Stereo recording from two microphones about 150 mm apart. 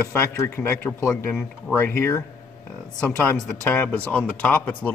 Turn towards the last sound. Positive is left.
turn(degrees=10)  # may be behind; listen again after turning